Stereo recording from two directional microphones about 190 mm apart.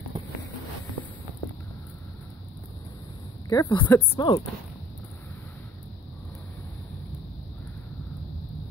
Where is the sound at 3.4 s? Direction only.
20° left (ahead or behind).